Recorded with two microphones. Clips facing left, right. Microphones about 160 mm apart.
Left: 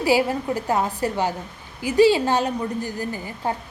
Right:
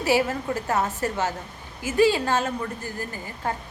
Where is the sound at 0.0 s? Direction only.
15° left (ahead or behind).